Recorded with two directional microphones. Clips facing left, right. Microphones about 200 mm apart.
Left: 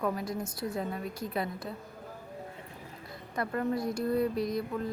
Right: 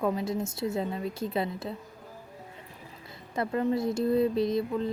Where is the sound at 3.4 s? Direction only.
25° right (ahead or behind).